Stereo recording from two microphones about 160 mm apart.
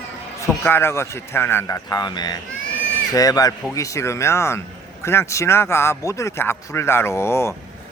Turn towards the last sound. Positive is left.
turn(degrees=15)  # may be behind; listen again after turning